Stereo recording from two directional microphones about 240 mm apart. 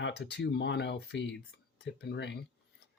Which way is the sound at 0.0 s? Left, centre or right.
Left.